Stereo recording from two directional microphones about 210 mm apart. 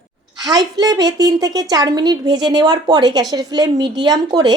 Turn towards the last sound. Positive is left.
turn(degrees=-20)  # may be behind; listen again after turning